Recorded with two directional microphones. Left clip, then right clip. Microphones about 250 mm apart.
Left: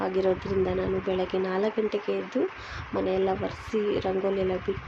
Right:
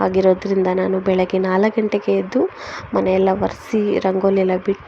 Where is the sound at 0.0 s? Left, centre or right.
Right.